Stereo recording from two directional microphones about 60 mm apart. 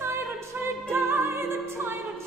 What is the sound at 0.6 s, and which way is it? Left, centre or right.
Music, right.